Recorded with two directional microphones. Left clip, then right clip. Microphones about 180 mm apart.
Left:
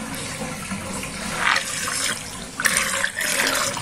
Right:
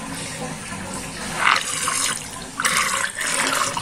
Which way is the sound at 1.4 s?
10° right (ahead or behind).